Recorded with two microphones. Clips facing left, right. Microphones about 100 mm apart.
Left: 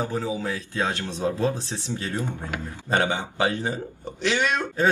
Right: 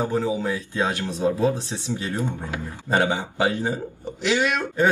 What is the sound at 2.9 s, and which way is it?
Speech, 5° right (ahead or behind).